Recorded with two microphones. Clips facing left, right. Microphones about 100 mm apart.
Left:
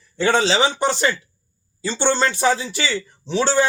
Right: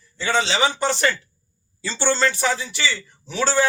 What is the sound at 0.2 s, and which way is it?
Speech, 45° left (ahead or behind).